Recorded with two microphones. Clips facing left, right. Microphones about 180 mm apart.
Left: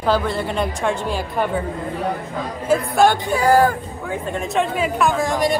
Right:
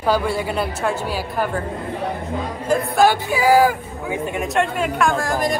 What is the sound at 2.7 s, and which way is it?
Speech, centre (ahead or behind).